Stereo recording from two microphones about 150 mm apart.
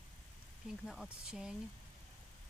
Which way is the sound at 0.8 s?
Centre (ahead or behind).